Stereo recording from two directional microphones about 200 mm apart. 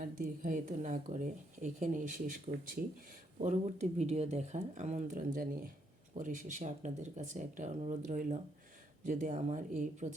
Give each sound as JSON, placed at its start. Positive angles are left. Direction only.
{"t": 0.0, "sound": "a woman's voice", "side_deg": -40}